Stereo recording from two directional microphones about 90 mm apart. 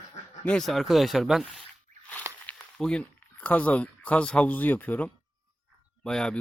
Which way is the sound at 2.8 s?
10° left (ahead or behind).